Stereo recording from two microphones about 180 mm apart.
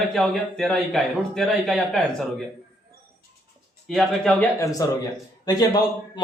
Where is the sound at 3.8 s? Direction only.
Centre (ahead or behind).